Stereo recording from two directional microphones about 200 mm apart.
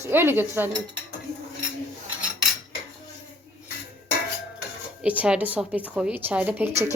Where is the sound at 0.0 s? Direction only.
10° right (ahead or behind).